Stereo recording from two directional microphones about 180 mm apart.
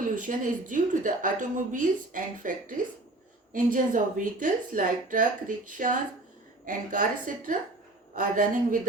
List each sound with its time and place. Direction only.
0.2 s a woman's voice: 50° right (ahead or behind)